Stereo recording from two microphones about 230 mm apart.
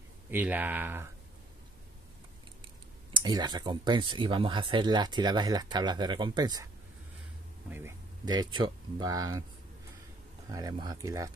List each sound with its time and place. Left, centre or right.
0.3 s speech: centre
2.6 s speech: right
7.7 s speech: centre
10.5 s speech: centre